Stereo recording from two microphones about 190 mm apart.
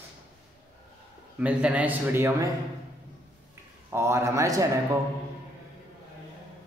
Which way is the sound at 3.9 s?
15° right (ahead or behind).